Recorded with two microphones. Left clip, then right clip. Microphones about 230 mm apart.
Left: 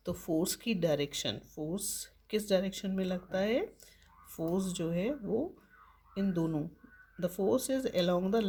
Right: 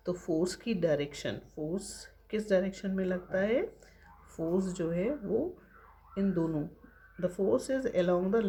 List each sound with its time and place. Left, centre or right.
0.0 s speech: left
6.1 s speech: left